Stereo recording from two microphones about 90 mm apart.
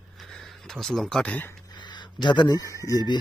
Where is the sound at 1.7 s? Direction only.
55° left (ahead or behind).